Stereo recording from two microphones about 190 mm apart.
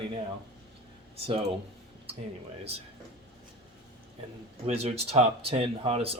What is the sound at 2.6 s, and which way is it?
Speech, 30° right (ahead or behind).